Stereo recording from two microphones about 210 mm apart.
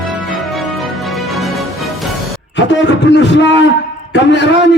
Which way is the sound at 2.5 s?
55° left (ahead or behind).